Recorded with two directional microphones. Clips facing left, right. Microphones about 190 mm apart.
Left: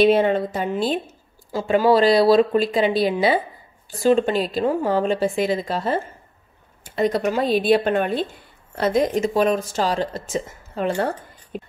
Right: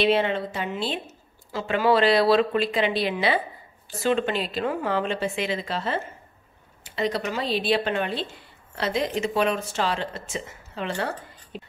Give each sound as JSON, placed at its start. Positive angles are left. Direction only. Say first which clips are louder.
{"t": 0.0, "sound": "a woman's voice", "louder": "left 6 dB", "side_deg": 45}